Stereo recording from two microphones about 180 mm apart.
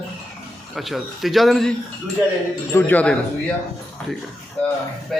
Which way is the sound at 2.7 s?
10° left (ahead or behind).